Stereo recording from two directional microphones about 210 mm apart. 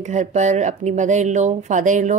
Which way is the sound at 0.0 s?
35° right (ahead or behind).